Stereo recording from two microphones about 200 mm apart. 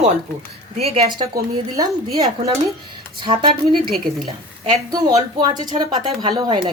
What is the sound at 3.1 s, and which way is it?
Speech, 25° right (ahead or behind).